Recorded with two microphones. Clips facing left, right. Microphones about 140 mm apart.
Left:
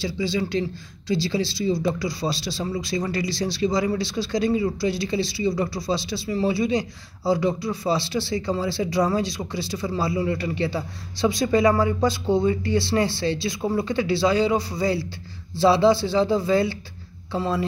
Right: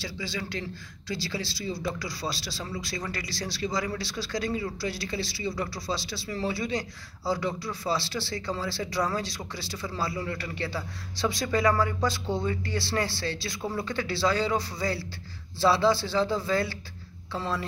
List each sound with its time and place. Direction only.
0.0 s speech: 20° left (ahead or behind)